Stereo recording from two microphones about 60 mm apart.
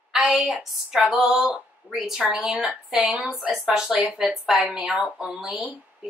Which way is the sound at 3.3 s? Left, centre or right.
Centre.